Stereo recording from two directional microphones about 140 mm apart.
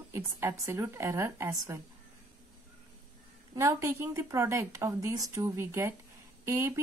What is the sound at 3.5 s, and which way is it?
Speech, 20° right (ahead or behind).